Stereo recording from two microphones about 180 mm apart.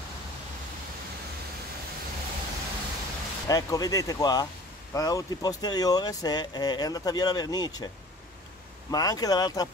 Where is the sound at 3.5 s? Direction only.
20° left (ahead or behind).